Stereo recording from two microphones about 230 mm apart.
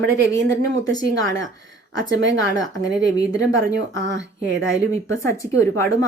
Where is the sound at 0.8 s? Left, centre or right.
Centre.